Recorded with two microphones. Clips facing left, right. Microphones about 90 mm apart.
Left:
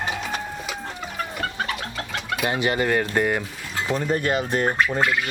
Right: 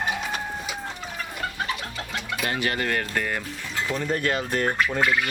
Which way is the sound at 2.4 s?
20° left (ahead or behind).